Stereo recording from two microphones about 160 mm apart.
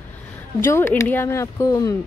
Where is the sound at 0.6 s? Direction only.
15° left (ahead or behind).